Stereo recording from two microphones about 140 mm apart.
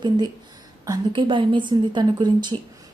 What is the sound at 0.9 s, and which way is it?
A woman's voice, 35° right (ahead or behind).